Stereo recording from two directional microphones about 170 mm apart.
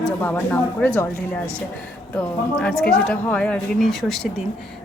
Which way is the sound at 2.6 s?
5° left (ahead or behind).